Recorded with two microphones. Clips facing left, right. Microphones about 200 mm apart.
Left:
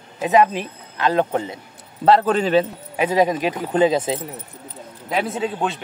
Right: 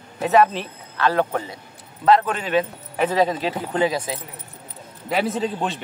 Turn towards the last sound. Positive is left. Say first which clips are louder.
# left 1 dB
turn(degrees=0)  # may be behind; listen again after turning